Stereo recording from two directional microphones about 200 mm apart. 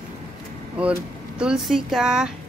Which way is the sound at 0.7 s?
5° right (ahead or behind).